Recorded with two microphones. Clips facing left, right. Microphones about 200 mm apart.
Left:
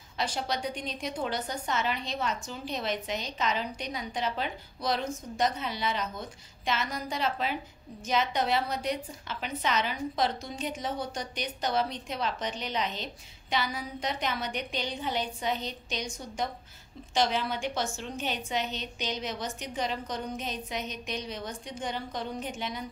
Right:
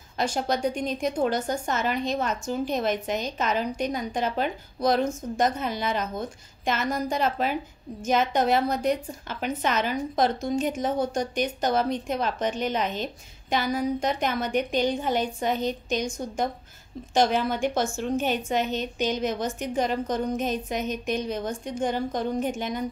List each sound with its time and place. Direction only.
0.2 s a woman's voice: 45° right (ahead or behind)